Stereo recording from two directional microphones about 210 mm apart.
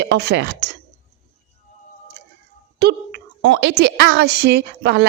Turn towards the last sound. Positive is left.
turn(degrees=-50)  # may be behind; listen again after turning